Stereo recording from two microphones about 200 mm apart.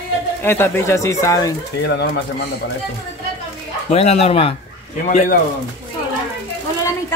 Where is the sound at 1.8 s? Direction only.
60° left (ahead or behind).